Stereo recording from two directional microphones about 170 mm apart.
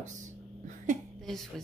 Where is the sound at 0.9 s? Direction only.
45° right (ahead or behind).